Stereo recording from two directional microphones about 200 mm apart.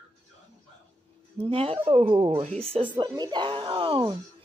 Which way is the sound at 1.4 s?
30° right (ahead or behind).